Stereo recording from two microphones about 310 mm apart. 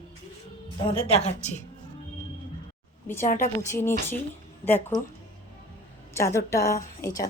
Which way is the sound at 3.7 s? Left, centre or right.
Centre.